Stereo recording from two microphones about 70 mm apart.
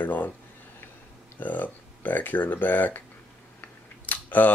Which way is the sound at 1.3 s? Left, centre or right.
Left.